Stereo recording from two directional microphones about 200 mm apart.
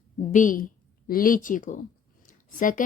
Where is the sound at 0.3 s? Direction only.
40° left (ahead or behind).